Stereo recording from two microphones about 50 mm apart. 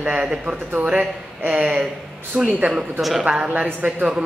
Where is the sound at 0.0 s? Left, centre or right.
Centre.